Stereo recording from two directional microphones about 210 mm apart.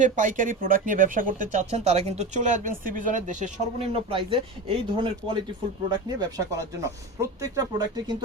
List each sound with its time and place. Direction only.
0.0 s speech: 35° right (ahead or behind); by 8.1 s 20° right (ahead or behind)